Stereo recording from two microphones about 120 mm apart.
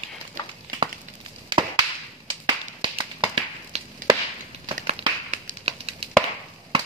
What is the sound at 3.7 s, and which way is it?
Chop, 65° right (ahead or behind).